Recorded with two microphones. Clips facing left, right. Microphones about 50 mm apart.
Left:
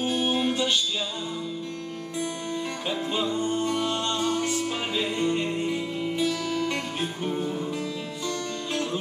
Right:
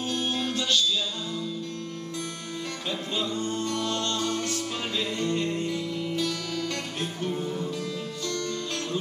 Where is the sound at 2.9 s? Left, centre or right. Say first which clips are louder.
Left 3 dB; centre.